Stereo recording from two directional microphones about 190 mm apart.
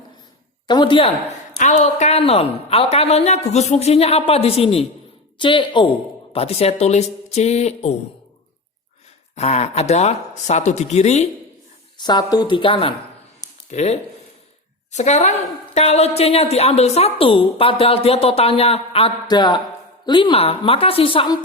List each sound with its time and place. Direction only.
0.7 s a woman's voice: 25° left (ahead or behind)
1.5 s a woman's voice: 40° left (ahead or behind)
9.3 s a woman's voice: 35° left (ahead or behind)
11.9 s a woman's voice: 20° left (ahead or behind)